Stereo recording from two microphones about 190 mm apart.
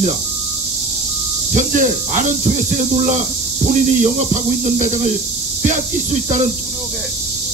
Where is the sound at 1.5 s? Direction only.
40° right (ahead or behind).